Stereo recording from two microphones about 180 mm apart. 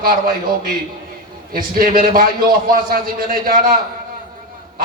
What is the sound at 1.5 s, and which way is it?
A man's voice, 55° right (ahead or behind).